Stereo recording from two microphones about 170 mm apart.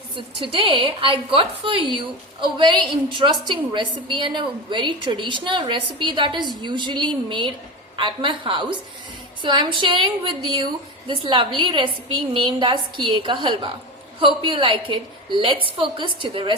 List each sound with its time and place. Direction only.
0.2 s a woman's voice: 30° right (ahead or behind)
11.1 s a woman's voice: 30° right (ahead or behind)